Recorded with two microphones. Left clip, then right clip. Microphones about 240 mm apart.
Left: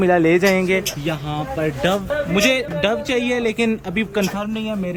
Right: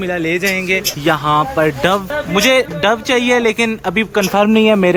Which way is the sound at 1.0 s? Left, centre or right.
Centre.